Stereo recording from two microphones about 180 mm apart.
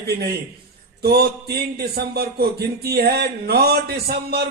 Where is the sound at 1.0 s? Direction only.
60° right (ahead or behind).